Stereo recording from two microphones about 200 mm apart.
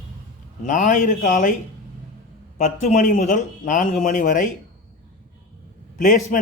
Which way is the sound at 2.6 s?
35° left (ahead or behind).